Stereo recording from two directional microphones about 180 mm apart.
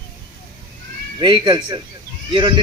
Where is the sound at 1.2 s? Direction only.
25° right (ahead or behind).